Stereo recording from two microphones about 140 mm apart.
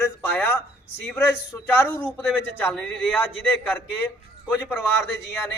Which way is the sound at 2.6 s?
10° left (ahead or behind).